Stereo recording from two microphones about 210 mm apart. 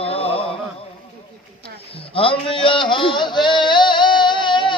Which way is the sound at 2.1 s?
25° left (ahead or behind).